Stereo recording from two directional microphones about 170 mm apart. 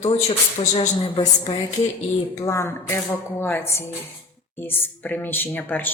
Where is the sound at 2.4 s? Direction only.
15° left (ahead or behind).